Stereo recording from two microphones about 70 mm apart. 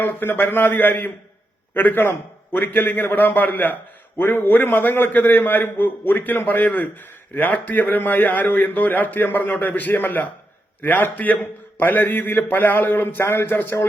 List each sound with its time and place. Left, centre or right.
0.0 s a man's voice: left